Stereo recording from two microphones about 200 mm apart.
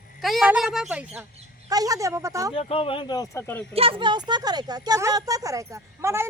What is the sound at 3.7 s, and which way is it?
Speech, 25° right (ahead or behind).